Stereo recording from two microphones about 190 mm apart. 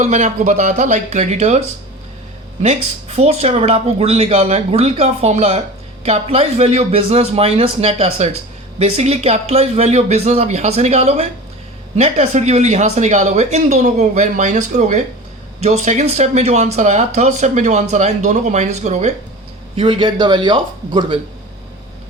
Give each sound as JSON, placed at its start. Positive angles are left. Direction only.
{"t": 0.0, "sound": "a man's voice", "side_deg": -35}